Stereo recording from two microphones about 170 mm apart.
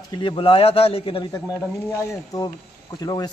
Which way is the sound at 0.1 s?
25° left (ahead or behind).